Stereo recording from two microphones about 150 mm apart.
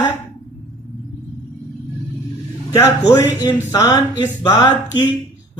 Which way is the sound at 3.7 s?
25° left (ahead or behind).